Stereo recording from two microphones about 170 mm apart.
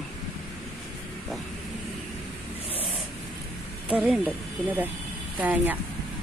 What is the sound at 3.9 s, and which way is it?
Speech, 5° right (ahead or behind).